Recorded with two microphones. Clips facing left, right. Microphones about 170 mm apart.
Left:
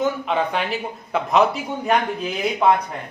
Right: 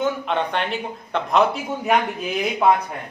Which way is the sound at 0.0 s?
5° left (ahead or behind).